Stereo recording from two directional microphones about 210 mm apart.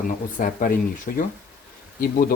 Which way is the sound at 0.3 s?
40° left (ahead or behind).